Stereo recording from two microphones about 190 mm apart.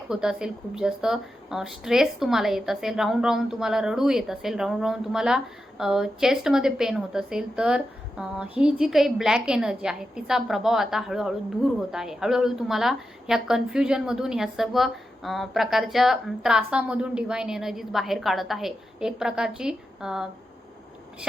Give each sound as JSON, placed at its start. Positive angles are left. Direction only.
{"t": 0.1, "sound": "a woman's voice", "side_deg": -5}